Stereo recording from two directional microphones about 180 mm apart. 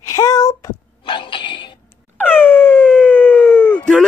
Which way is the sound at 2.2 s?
10° left (ahead or behind).